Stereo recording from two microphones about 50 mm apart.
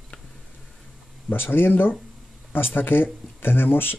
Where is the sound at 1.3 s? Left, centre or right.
Left.